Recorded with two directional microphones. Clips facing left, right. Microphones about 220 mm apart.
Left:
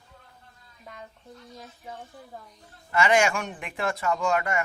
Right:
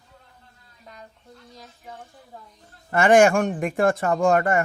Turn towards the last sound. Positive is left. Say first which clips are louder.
# right 6 dB
turn(degrees=-50)  # may be behind; listen again after turning